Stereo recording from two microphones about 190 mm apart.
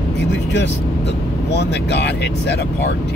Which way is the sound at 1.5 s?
65° left (ahead or behind).